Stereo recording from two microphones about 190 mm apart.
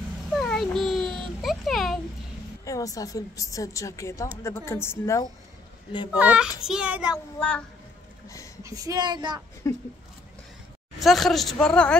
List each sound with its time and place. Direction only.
0.3 s a sound: centre (ahead or behind)
2.6 s a woman's voice: 15° left (ahead or behind)
6.1 s a child's voice: 5° right (ahead or behind)
7.3 s a woman's voice: 5° left (ahead or behind)
8.6 s child singing: 20° right (ahead or behind)
9.6 s a woman's voice: 15° left (ahead or behind)
11.0 s a woman's voice: centre (ahead or behind)